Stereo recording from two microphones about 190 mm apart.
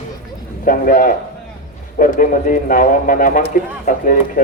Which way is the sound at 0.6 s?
45° left (ahead or behind).